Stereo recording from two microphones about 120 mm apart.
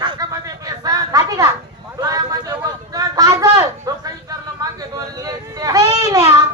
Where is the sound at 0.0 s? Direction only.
35° right (ahead or behind).